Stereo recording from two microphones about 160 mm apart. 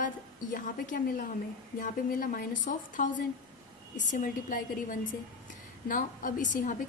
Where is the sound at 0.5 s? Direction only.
55° left (ahead or behind).